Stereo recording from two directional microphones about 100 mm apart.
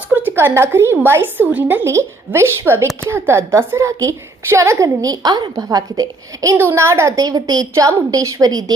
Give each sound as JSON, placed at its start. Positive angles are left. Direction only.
{"t": 0.1, "sound": "a woman's voice", "side_deg": -20}
{"t": 6.6, "sound": "a woman's voice", "side_deg": -25}